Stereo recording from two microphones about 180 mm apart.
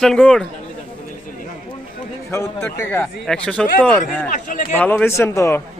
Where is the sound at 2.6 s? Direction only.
15° left (ahead or behind).